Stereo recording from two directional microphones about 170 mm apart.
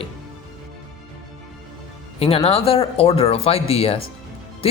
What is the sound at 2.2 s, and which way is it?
Speech, 35° left (ahead or behind).